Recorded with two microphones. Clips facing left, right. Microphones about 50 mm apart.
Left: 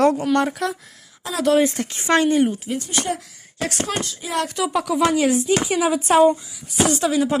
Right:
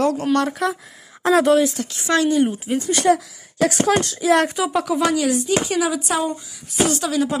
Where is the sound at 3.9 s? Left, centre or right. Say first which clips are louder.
Right 9 dB; right.